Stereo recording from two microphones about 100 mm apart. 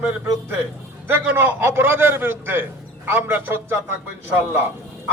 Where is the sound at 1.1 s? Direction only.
20° right (ahead or behind).